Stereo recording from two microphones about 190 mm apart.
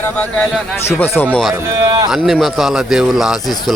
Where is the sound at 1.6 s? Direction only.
15° right (ahead or behind).